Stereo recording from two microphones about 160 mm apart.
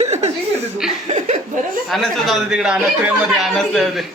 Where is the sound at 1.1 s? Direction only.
50° right (ahead or behind).